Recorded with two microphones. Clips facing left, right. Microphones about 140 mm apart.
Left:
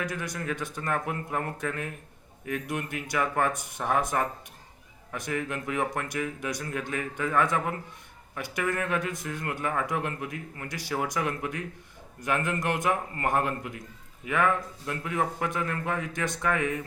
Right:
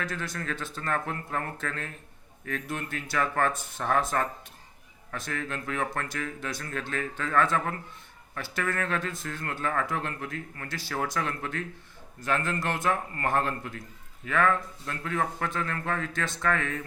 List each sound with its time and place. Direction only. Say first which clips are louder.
0.0 s speech: left 1 dB; 15° left (ahead or behind)